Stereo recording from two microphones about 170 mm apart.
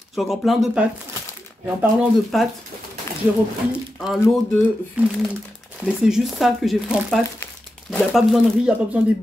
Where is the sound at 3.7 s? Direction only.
Centre (ahead or behind).